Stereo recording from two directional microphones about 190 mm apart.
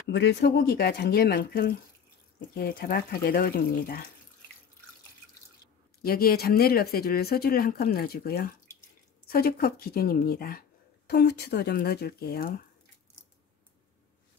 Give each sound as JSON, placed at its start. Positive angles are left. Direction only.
{"t": 0.1, "sound": "speech", "side_deg": 65}
{"t": 6.0, "sound": "speech", "side_deg": 50}